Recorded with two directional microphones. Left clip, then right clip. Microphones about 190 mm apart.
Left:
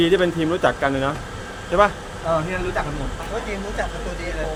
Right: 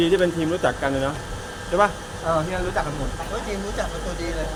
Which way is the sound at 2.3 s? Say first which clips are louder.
Left 1 dB; 5° right (ahead or behind).